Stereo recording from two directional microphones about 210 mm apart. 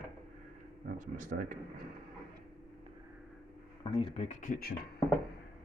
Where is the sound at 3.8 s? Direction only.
25° left (ahead or behind); by 4.7 s 45° left (ahead or behind).